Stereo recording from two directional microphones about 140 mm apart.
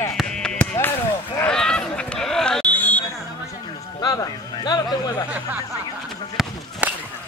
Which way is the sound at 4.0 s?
30° left (ahead or behind).